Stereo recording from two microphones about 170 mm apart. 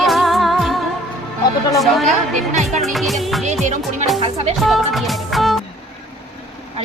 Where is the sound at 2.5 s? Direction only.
40° right (ahead or behind).